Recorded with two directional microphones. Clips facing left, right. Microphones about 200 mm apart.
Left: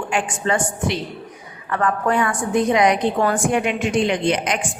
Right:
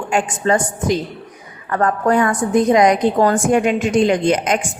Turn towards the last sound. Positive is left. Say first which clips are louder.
# right 4 dB
turn(degrees=-45)  # may be behind; listen again after turning